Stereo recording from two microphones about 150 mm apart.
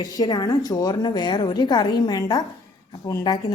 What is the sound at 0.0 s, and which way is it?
A woman's voice, 25° left (ahead or behind).